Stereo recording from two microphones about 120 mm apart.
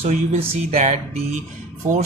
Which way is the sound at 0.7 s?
70° right (ahead or behind).